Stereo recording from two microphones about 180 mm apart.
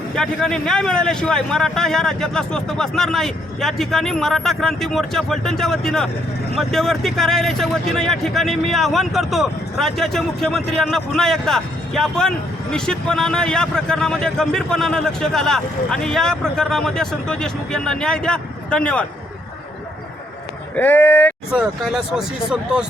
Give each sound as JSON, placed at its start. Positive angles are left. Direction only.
{"t": 0.2, "sound": "a man's voice", "side_deg": 5}
{"t": 20.7, "sound": "speech", "side_deg": 10}
{"t": 21.5, "sound": "a man's voice", "side_deg": -5}